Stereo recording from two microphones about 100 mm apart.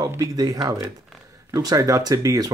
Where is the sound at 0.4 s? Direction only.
40° right (ahead or behind).